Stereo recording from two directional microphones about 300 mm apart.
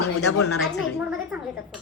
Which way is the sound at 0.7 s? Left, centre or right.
Centre.